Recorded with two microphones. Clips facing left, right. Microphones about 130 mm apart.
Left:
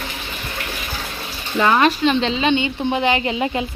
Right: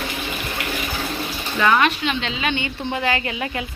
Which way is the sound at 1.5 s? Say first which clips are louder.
Left 2 dB; 30° left (ahead or behind).